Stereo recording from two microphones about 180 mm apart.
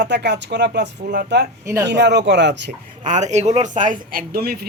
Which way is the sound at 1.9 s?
70° right (ahead or behind).